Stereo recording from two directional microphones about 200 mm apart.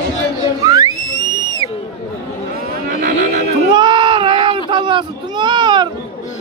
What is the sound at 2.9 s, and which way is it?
Horse, 40° right (ahead or behind).